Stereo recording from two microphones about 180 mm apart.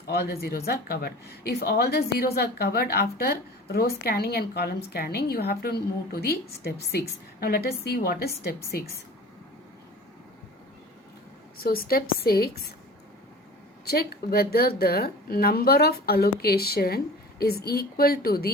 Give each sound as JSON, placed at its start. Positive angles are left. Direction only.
{"t": 0.1, "sound": "speech", "side_deg": 60}
{"t": 11.5, "sound": "speech", "side_deg": 55}
{"t": 13.8, "sound": "speech", "side_deg": 60}